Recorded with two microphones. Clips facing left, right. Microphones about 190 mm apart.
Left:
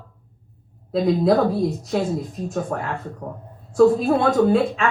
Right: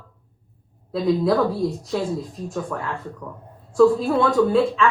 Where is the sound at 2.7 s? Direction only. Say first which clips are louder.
Left 3 dB; 40° left (ahead or behind).